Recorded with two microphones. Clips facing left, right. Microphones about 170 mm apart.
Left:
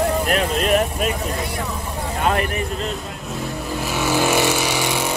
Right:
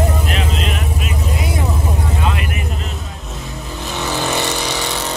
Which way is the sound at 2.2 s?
40° left (ahead or behind).